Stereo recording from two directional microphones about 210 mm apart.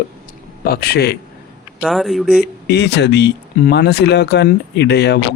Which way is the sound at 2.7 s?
55° left (ahead or behind).